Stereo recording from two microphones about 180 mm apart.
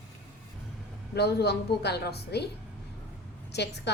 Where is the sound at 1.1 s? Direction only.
65° left (ahead or behind).